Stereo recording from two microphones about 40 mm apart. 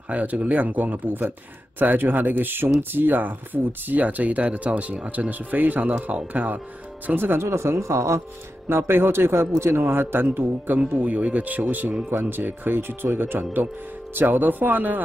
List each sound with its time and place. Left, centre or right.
0.1 s speech: right
7.2 s a man's voice: right
10.2 s speech: right
11.0 s speech: right
12.1 s speech: right